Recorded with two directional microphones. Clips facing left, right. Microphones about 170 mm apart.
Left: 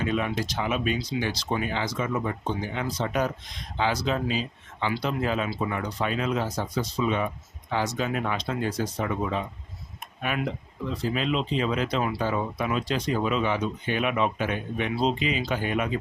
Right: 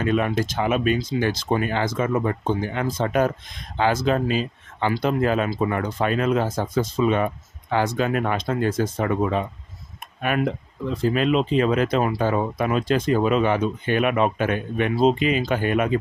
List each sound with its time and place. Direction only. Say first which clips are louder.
0.0 s speech: right 5 dB; 55° right (ahead or behind)